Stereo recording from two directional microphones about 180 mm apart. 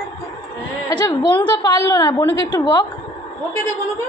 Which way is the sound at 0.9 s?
25° left (ahead or behind).